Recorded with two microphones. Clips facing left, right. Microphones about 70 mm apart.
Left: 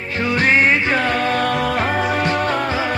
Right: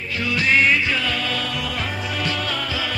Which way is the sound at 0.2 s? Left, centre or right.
Left.